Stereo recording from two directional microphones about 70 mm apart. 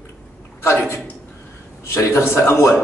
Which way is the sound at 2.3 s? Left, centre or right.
Left.